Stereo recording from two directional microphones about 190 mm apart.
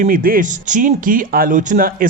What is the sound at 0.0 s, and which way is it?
Speech, 45° right (ahead or behind).